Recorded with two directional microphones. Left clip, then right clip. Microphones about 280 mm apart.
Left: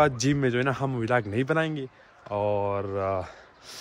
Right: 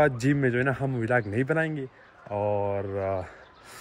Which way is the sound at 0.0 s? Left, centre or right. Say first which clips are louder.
Even; centre.